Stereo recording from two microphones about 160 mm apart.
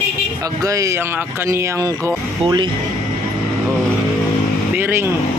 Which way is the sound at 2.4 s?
30° right (ahead or behind).